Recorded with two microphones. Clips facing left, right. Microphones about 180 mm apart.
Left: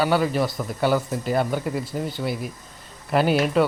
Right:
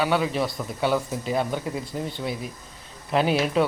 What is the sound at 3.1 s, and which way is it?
Speech, centre (ahead or behind).